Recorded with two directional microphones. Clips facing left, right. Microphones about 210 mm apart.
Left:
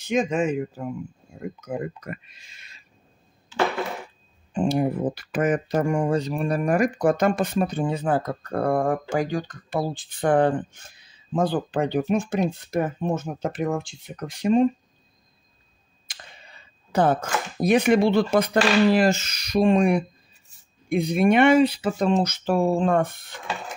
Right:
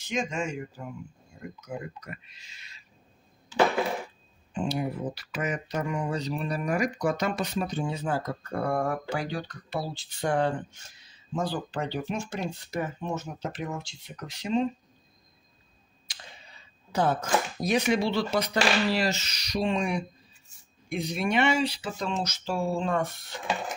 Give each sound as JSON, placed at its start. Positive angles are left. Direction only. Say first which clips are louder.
{"t": 0.0, "sound": "speech", "louder": "left 8 dB", "side_deg": 55}
{"t": 4.6, "sound": "speech", "louder": "left 7 dB", "side_deg": 50}
{"t": 16.1, "sound": "a sound", "louder": "left 3 dB", "side_deg": 55}
{"t": 16.9, "sound": "speech", "louder": "left 4 dB", "side_deg": 55}